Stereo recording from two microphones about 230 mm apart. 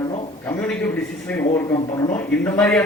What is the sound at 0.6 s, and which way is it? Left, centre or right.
A man's voice, centre.